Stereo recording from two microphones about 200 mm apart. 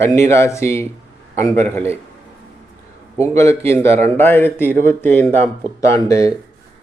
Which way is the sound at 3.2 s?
15° left (ahead or behind).